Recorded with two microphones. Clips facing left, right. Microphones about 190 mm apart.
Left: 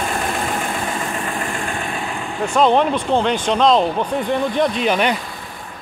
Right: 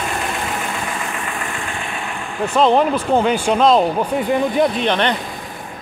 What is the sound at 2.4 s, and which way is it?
Speech, 5° right (ahead or behind).